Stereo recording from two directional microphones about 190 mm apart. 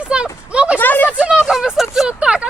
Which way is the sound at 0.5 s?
5° right (ahead or behind).